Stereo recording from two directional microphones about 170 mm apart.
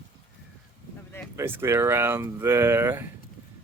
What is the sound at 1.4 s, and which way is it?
Speech, 15° right (ahead or behind).